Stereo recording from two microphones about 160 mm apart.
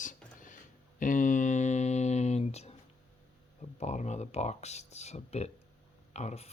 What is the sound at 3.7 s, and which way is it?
Speech, 45° left (ahead or behind).